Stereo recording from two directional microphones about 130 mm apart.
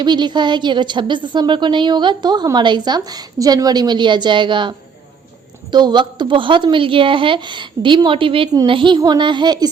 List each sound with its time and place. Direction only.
0.0 s a woman's voice: 35° right (ahead or behind)
5.7 s a woman's voice: 35° right (ahead or behind)